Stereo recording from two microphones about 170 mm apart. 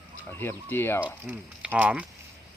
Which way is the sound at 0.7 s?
15° left (ahead or behind).